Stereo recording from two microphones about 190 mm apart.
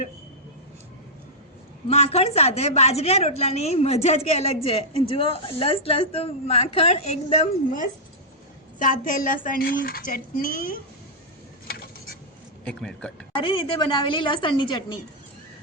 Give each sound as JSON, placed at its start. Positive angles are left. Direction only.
{"t": 1.9, "sound": "a woman's voice", "side_deg": 35}
{"t": 12.6, "sound": "a man's voice", "side_deg": 5}
{"t": 13.3, "sound": "a woman's voice", "side_deg": 30}